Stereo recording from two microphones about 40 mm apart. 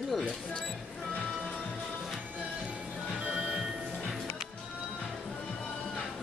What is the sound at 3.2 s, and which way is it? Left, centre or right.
Music, centre.